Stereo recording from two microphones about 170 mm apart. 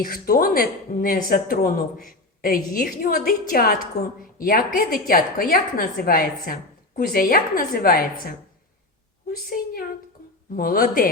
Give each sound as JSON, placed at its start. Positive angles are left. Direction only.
{"t": 0.0, "sound": "a woman's voice", "side_deg": 55}